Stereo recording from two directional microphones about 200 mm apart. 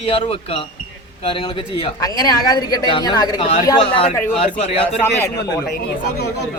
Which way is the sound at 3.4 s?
35° left (ahead or behind).